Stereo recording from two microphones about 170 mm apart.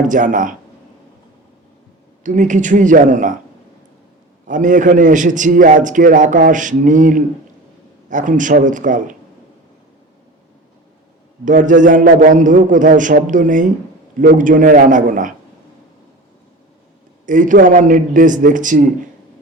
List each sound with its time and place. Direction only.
0.0 s a man's voice: 50° right (ahead or behind)
2.2 s a man's voice: 50° right (ahead or behind)
4.4 s a man's voice: 50° right (ahead or behind)
11.4 s a man's voice: 50° right (ahead or behind)
17.2 s a man's voice: 50° right (ahead or behind)